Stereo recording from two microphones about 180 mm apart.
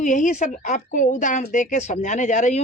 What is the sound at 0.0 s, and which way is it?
Speech, 45° left (ahead or behind).